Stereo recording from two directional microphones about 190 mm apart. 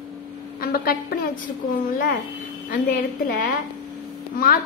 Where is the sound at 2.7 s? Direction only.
50° left (ahead or behind).